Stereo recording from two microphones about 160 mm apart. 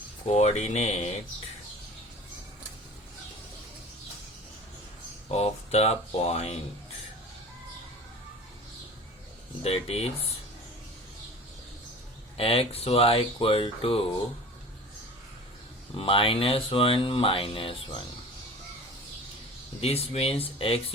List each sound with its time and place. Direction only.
0.3 s speech: 45° left (ahead or behind)
5.3 s speech: 40° left (ahead or behind)
9.6 s speech: 40° left (ahead or behind)
12.4 s speech: 35° left (ahead or behind)
16.0 s speech: 35° left (ahead or behind)
19.8 s speech: 40° left (ahead or behind)